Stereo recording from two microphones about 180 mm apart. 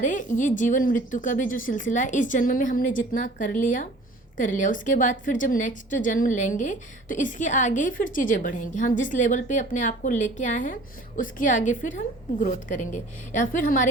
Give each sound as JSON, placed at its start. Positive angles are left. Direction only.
{"t": 0.0, "sound": "a woman's voice", "side_deg": 45}